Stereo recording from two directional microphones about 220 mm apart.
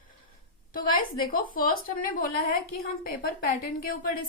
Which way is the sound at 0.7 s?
40° left (ahead or behind).